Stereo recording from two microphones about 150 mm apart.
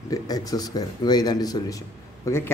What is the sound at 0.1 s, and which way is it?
A man's voice, 25° left (ahead or behind).